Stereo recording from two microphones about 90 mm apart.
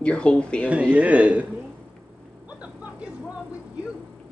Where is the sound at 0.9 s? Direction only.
15° right (ahead or behind).